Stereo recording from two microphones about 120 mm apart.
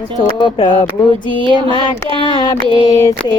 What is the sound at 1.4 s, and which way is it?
Child singing, 45° right (ahead or behind).